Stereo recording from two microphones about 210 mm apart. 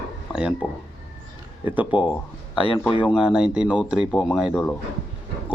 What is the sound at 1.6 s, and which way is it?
Speech, 5° right (ahead or behind).